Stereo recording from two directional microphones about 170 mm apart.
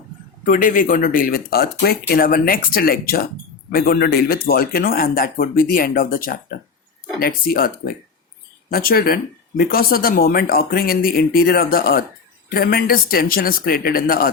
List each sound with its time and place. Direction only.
0.4 s speech: 50° left (ahead or behind)